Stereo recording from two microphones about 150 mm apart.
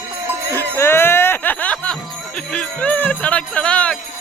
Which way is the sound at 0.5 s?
15° left (ahead or behind).